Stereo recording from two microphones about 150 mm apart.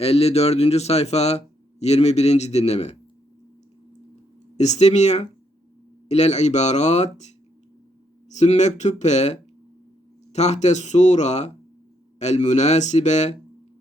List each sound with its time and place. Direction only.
0.0 s a man's voice: 40° left (ahead or behind)
4.5 s a man's voice: 50° left (ahead or behind)
8.3 s a man's voice: 50° left (ahead or behind)